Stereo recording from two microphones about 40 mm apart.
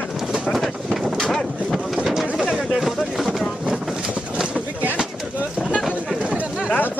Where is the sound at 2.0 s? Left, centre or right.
Centre.